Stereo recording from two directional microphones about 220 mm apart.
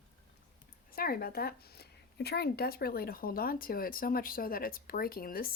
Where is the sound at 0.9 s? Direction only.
45° left (ahead or behind).